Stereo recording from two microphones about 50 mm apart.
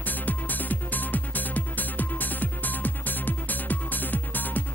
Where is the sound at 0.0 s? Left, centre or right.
Left.